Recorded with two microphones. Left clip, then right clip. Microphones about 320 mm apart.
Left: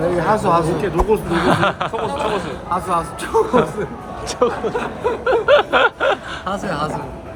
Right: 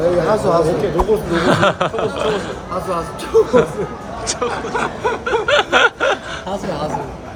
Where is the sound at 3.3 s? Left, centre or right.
Centre.